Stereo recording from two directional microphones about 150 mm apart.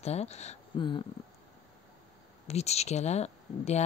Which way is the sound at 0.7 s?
35° left (ahead or behind).